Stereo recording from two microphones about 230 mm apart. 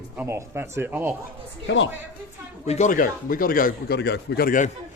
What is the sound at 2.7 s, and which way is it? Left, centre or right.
A man's voice, left.